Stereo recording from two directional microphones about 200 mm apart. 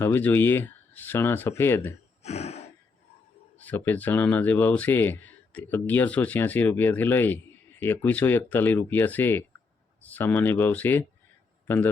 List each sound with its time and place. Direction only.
0.0 s speech: 10° left (ahead or behind)
2.2 s snort: 35° left (ahead or behind)
3.6 s speech: 10° left (ahead or behind)